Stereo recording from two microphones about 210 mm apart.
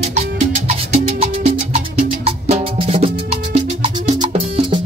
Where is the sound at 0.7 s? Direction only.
30° right (ahead or behind).